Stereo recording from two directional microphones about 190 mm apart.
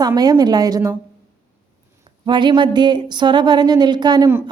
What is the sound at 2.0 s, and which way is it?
Speech, 25° right (ahead or behind).